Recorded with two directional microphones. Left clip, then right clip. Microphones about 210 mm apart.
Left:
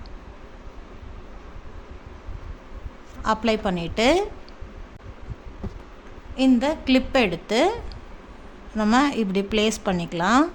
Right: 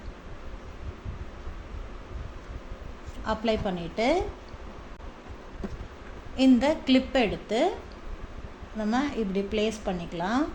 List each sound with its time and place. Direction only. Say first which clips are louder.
3.2 s a woman's voice: left 5 dB; 30° left (ahead or behind)
6.3 s a woman's voice: left 2 dB; 10° left (ahead or behind); by 7.7 s 30° left (ahead or behind)
8.8 s a woman's voice: left 8 dB; 35° left (ahead or behind)